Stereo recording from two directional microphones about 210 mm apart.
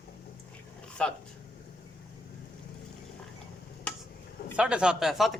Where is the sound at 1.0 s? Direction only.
5° left (ahead or behind).